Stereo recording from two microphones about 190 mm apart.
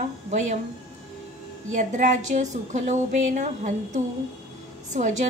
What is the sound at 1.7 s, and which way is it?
A woman's voice, 40° right (ahead or behind).